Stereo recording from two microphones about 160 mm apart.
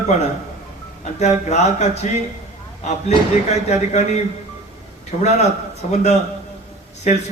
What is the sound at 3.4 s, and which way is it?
Speech, 45° left (ahead or behind).